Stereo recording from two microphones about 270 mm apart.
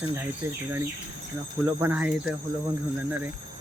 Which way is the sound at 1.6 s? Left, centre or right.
Centre.